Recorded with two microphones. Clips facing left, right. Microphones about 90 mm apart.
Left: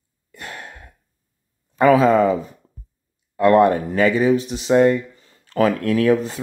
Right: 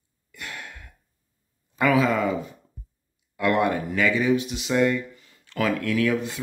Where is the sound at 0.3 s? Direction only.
35° left (ahead or behind).